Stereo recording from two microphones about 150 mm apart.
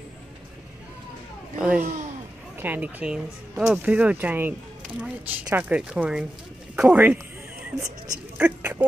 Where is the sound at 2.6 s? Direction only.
10° right (ahead or behind).